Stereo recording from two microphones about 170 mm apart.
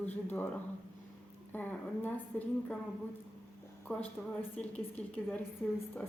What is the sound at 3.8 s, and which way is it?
A woman's voice, 5° left (ahead or behind).